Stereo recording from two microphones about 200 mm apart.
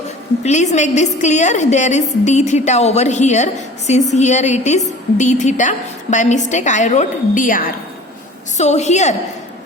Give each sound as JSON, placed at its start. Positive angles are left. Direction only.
{"t": 0.4, "sound": "a woman's voice", "side_deg": 35}